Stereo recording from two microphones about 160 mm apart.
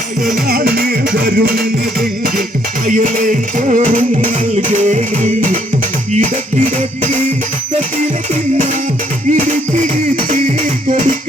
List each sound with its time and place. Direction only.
0.4 s music: 70° right (ahead or behind)
2.8 s music: 55° right (ahead or behind)
4.9 s music: 50° right (ahead or behind)